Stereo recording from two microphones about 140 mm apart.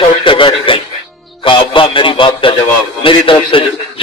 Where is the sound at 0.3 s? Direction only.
35° left (ahead or behind).